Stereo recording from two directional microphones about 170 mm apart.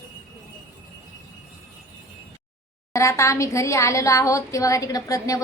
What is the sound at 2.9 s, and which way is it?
A woman's voice, 15° left (ahead or behind).